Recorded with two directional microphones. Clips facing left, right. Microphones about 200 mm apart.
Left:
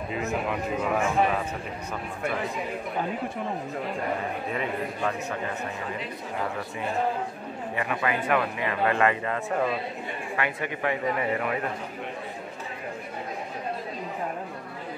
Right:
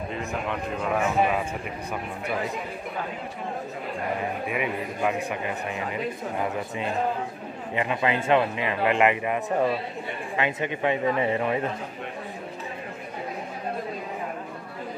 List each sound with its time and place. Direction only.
0.1 s a man's voice: 5° left (ahead or behind)
0.9 s a man's voice: 5° right (ahead or behind)
4.5 s a man's voice: 10° right (ahead or behind)
7.7 s speech: 20° right (ahead or behind)